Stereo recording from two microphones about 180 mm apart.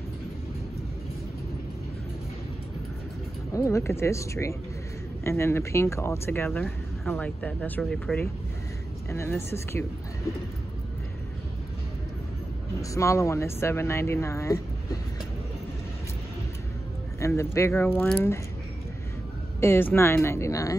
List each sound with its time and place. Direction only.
3.5 s speech: 15° left (ahead or behind)
12.9 s speech: 15° left (ahead or behind)
17.4 s speech: 15° left (ahead or behind)
19.6 s speech: 10° left (ahead or behind)